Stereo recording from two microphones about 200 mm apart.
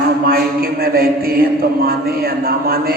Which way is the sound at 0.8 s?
50° right (ahead or behind).